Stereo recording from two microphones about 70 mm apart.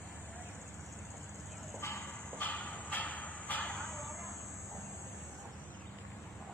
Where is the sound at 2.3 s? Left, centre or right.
Left.